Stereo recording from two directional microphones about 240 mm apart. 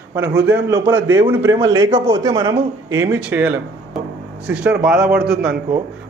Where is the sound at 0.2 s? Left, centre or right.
Centre.